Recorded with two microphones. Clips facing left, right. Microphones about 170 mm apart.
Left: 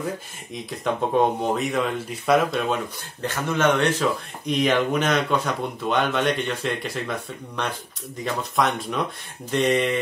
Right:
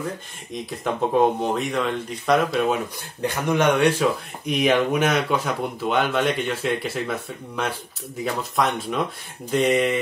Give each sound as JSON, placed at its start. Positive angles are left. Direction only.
{"t": 0.5, "sound": "speech", "side_deg": 0}
{"t": 3.2, "sound": "speech", "side_deg": -15}